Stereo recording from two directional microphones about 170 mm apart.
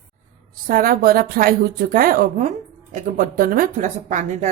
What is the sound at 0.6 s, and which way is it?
A woman's voice, 60° right (ahead or behind).